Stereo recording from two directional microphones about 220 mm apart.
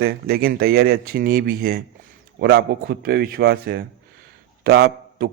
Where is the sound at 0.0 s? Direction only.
45° right (ahead or behind).